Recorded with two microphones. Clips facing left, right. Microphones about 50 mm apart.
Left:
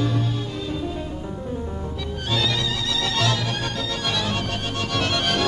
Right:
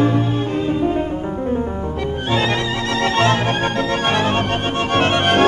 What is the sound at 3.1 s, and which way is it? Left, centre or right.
Music, right.